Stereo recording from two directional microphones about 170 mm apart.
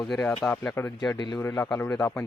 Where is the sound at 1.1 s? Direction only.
25° left (ahead or behind).